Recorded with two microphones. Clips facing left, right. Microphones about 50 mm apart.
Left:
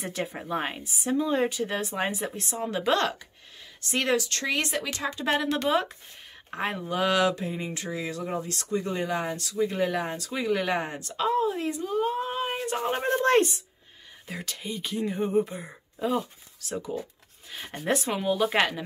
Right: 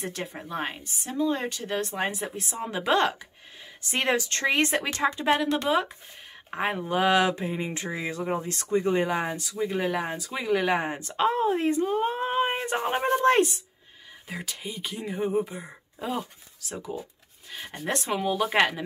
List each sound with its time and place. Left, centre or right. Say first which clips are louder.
0.0 s speech: left 2 dB; centre
3.9 s speech: even; right
5.2 s speech: right 1 dB; centre
6.5 s speech: right 3 dB; centre
10.9 s a sound: right 2 dB; right
12.8 s speech: right 2 dB; centre